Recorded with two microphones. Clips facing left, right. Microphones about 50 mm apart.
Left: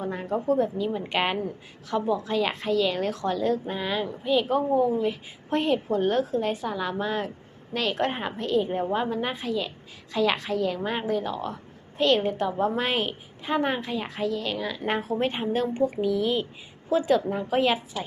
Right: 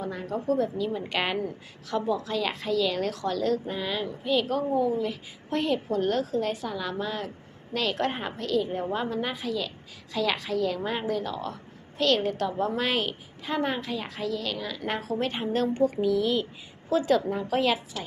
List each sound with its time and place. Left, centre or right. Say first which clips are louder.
0.0 s a woman's voice: left 3 dB; left
4.4 s a woman's voice: left 3 dB; left
7.7 s a woman's voice: left 1 dB; centre